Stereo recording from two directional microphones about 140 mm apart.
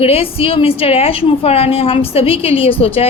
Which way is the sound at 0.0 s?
45° left (ahead or behind).